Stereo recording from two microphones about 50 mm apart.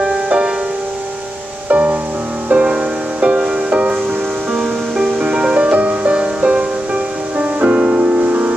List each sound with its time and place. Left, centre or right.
0.0 s music: centre
1.7 s music: right
2.5 s music: right
4.5 s music: centre; by 8.5 s right